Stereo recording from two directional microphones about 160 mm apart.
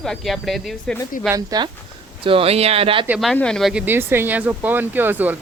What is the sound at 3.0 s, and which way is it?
Speech, 5° right (ahead or behind).